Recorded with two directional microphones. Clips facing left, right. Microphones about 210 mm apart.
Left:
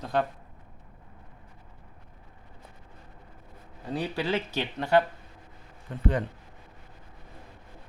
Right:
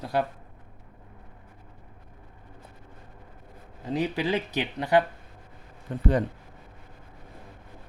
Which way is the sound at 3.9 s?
20° right (ahead or behind).